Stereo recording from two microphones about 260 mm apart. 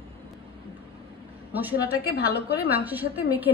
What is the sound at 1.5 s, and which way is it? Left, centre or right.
Speech, centre.